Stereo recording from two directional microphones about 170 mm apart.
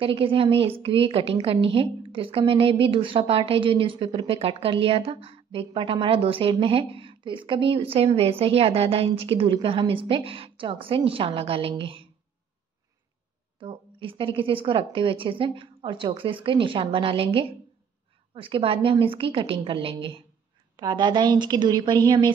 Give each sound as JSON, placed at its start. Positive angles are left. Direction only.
{"t": 0.0, "sound": "a woman's voice", "side_deg": -30}
{"t": 13.6, "sound": "a woman's voice", "side_deg": -30}